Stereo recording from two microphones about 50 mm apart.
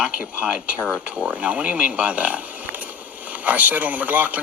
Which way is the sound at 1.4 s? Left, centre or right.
Right.